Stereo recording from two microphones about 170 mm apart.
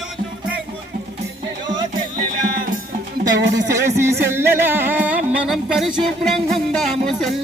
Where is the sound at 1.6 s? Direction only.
25° right (ahead or behind).